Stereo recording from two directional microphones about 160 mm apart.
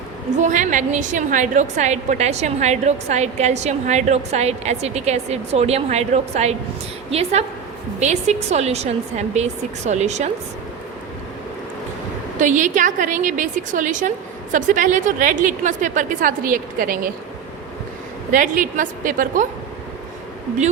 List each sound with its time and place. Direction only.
0.4 s a woman's voice: 50° right (ahead or behind)
12.4 s a woman's voice: 50° right (ahead or behind)
18.3 s a woman's voice: 55° right (ahead or behind)